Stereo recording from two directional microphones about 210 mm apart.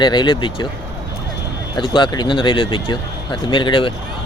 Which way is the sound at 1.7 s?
20° left (ahead or behind).